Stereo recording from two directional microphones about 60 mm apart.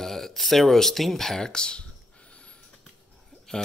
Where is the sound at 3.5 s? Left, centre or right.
Centre.